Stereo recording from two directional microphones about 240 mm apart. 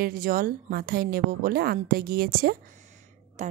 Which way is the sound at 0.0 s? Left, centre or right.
Right.